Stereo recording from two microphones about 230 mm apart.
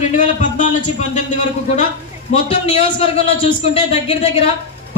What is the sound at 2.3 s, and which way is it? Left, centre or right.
A man's voice, left.